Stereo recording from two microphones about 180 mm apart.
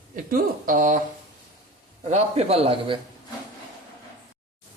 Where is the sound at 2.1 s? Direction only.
35° right (ahead or behind).